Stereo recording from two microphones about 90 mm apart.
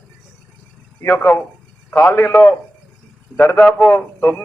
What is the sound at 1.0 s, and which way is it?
A man's voice, 20° left (ahead or behind).